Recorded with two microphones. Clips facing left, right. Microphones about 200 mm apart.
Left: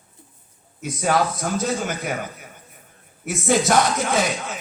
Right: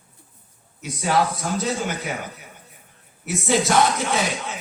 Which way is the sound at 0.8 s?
50° left (ahead or behind).